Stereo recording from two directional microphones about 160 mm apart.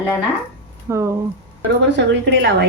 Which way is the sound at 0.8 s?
15° right (ahead or behind).